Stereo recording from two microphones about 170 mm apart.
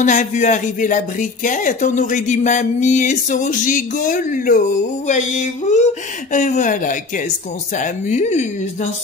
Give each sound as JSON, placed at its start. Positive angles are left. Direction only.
{"t": 0.0, "sound": "speech", "side_deg": 45}